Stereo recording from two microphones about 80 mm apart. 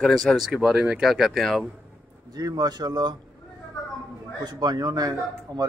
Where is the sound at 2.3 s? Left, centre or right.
Right.